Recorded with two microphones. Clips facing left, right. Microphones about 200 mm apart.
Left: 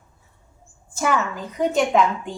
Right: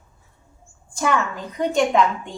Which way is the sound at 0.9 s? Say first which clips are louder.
Even; 5° left (ahead or behind).